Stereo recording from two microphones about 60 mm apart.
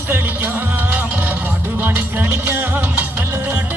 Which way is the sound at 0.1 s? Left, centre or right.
Right.